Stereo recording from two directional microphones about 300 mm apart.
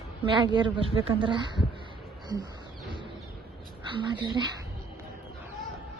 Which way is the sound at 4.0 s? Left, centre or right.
Centre.